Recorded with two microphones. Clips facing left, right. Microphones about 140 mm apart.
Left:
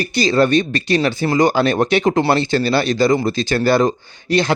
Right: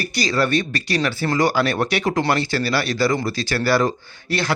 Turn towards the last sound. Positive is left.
turn(degrees=20)  # may be behind; listen again after turning